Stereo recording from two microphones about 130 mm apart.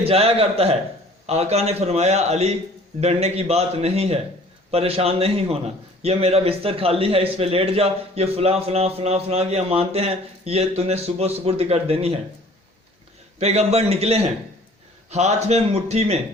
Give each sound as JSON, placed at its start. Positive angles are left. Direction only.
{"t": 0.0, "sound": "a man's voice", "side_deg": -50}
{"t": 13.4, "sound": "a man's voice", "side_deg": -55}